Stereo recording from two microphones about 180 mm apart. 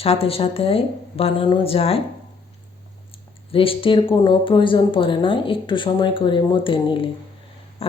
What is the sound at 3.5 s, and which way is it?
Speech, 30° left (ahead or behind).